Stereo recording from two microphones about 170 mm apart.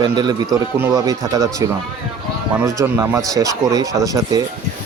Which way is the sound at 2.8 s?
10° right (ahead or behind).